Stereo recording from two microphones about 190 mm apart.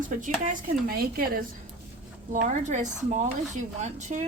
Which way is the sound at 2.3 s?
40° right (ahead or behind).